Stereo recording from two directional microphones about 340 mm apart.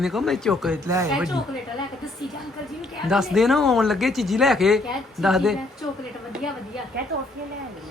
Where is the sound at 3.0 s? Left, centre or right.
Centre.